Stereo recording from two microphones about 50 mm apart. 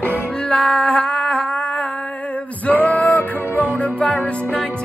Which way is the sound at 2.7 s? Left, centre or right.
Left.